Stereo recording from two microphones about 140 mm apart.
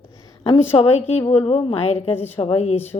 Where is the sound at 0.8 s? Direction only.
50° left (ahead or behind).